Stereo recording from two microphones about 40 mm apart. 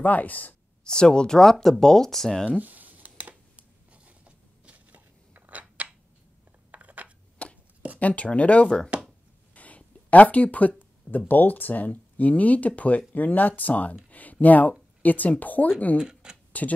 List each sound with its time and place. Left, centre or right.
0.0 s speech: left
0.8 s speech: centre
2.6 s a sound: right
4.6 s scissors: right
6.7 s a sound: right
7.4 s chopping: left
8.0 s speech: left
8.6 s speech: centre
9.5 s a sound: left
11.1 s speech: left
16.0 s speech: centre